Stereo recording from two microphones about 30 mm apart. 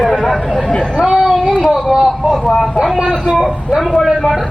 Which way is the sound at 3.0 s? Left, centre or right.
Right.